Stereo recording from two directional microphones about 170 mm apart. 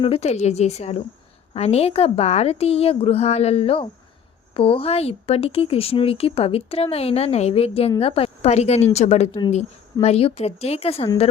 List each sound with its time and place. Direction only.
0.0 s speech: 35° left (ahead or behind)